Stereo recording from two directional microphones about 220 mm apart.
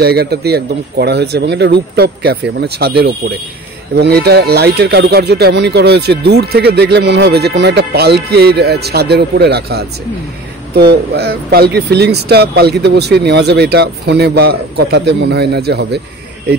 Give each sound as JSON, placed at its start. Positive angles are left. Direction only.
{"t": 0.0, "sound": "speech", "side_deg": -45}